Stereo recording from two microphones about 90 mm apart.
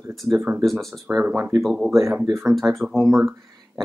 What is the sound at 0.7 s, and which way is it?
Speech, centre (ahead or behind).